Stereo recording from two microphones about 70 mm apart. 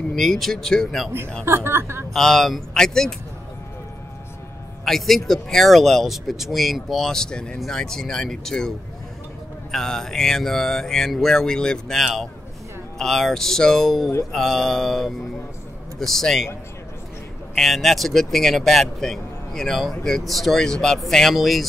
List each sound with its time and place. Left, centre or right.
0.1 s speech: centre
1.4 s a woman's voice: right
2.1 s speech: centre
4.8 s speech: centre
17.6 s speech: centre